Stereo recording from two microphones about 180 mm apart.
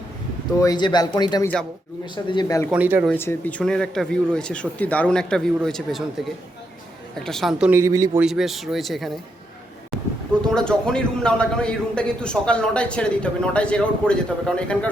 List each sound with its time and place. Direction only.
0.6 s speech: 25° left (ahead or behind)
2.6 s speech: 10° right (ahead or behind)
3.1 s a man's voice: 10° left (ahead or behind)
7.3 s a man's voice: centre (ahead or behind)
7.7 s speech: 15° right (ahead or behind)
8.2 s a man's voice: centre (ahead or behind)
10.5 s a man's voice: 5° left (ahead or behind)